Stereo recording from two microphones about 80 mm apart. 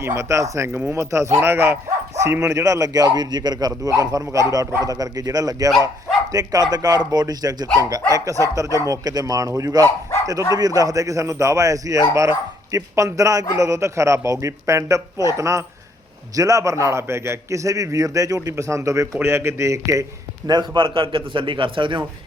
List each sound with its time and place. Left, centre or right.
0.0 s speech: right
2.5 s speech: right
20.5 s a man's voice: right